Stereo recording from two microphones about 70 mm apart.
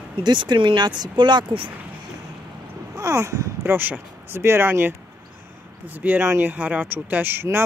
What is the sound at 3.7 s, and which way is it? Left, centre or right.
Speech, right.